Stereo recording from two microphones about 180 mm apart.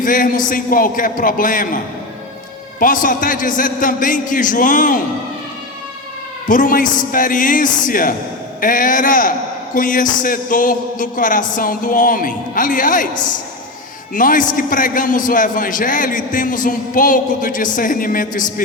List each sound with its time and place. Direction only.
0.0 s a man's voice: 50° left (ahead or behind)
6.5 s a man's voice: 50° left (ahead or behind)
14.1 s a man's voice: 50° left (ahead or behind)